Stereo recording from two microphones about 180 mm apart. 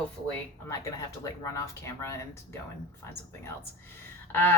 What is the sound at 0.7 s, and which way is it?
Speech, 15° left (ahead or behind).